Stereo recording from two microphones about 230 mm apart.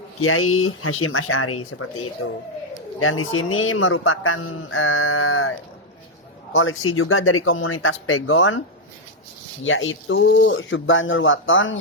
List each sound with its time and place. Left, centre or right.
0.2 s speech: left
3.0 s speech: left
9.6 s speech: left